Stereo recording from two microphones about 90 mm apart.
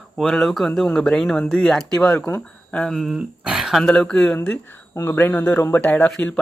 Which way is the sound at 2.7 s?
5° left (ahead or behind).